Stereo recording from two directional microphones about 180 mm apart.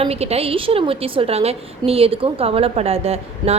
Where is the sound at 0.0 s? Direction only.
35° right (ahead or behind).